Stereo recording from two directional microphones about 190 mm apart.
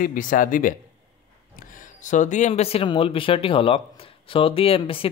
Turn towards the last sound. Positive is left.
turn(degrees=30)  # may be behind; listen again after turning